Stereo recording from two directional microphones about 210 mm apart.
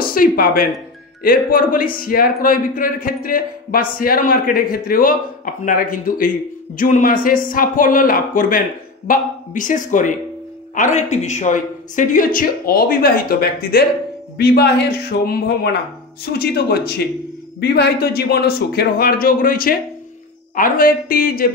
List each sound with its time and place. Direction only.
0.0 s speech: 45° left (ahead or behind)